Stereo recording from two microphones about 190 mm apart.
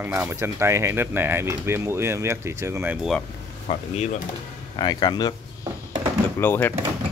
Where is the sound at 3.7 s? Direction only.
35° left (ahead or behind).